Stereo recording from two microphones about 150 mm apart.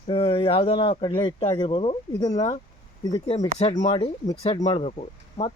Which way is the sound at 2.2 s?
25° left (ahead or behind).